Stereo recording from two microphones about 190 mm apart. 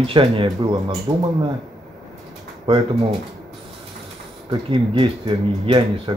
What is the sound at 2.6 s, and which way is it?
Speech, 30° right (ahead or behind).